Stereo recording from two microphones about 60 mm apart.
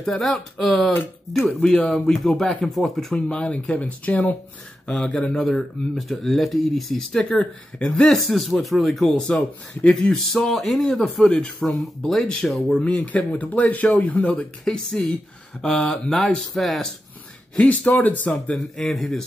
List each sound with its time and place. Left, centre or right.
0.0 s speech: centre
3.3 s speech: centre
7.9 s speech: centre
12.8 s speech: left
14.6 s speech: centre
17.6 s speech: left
18.5 s speech: centre